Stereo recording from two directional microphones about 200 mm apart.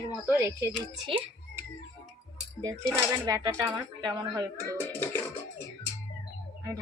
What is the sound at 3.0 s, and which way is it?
Speech, 15° right (ahead or behind).